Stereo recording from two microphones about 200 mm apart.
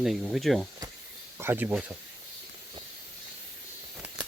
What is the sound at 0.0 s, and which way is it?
Speech, centre (ahead or behind).